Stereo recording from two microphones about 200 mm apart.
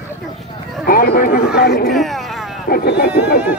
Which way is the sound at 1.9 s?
Centre (ahead or behind).